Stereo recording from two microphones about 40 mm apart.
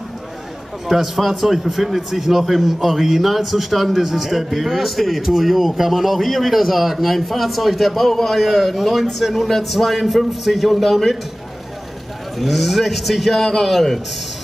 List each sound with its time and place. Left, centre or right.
0.8 s a man's voice: centre
12.4 s a man's voice: centre